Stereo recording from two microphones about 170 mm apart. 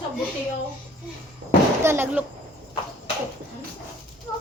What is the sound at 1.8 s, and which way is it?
Speech, 15° right (ahead or behind).